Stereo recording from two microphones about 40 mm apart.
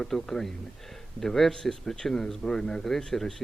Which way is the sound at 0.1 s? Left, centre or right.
Centre.